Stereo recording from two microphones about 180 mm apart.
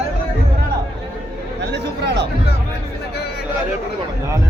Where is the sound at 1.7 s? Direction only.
70° right (ahead or behind).